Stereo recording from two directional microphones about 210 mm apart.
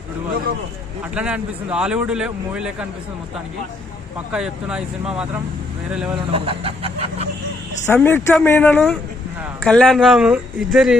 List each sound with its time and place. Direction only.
1.1 s speech: 5° right (ahead or behind)
4.3 s speech: 5° right (ahead or behind)
6.3 s chicken: 25° right (ahead or behind)
7.9 s speech: 10° left (ahead or behind)